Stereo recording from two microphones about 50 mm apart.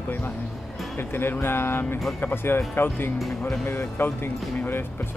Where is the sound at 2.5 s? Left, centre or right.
Left.